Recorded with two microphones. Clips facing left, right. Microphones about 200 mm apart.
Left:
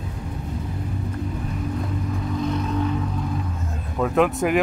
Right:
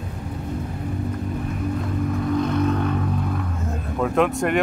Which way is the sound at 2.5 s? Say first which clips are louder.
Right 3 dB; 60° right (ahead or behind).